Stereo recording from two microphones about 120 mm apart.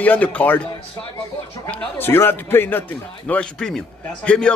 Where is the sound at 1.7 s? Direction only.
15° left (ahead or behind).